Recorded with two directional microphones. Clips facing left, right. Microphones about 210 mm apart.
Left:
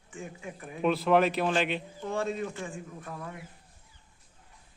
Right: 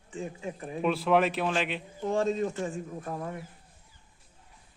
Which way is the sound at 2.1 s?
40° right (ahead or behind).